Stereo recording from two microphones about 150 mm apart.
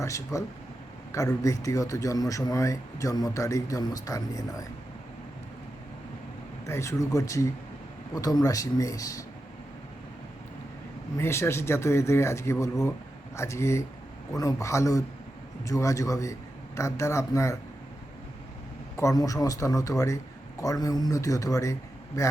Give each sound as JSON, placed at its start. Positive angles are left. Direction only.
{"t": 0.0, "sound": "speech", "side_deg": 20}
{"t": 6.7, "sound": "speech", "side_deg": 20}
{"t": 11.2, "sound": "speech", "side_deg": 15}
{"t": 18.9, "sound": "speech", "side_deg": 20}